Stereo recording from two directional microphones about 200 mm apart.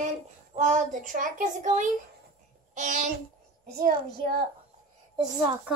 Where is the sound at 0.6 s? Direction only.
40° right (ahead or behind).